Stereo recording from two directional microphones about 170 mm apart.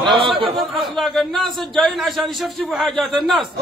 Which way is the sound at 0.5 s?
Centre (ahead or behind).